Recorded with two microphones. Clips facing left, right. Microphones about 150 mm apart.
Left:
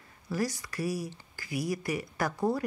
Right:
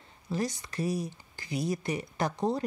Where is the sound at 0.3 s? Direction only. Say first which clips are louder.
Even; 20° right (ahead or behind).